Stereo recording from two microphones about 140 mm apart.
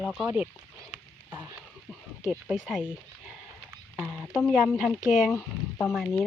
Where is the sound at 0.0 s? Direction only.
Centre (ahead or behind).